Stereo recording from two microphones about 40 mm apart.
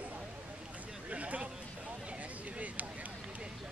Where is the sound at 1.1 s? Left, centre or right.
Right.